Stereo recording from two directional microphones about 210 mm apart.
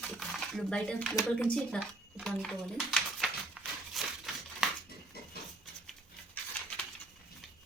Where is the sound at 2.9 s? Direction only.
Centre (ahead or behind).